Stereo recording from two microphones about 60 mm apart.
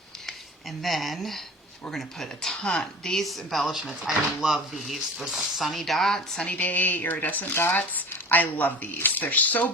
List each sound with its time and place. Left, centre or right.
0.8 s a woman's voice: centre
6.6 s speech: left